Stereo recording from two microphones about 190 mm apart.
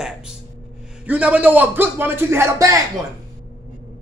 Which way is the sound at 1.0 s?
5° right (ahead or behind).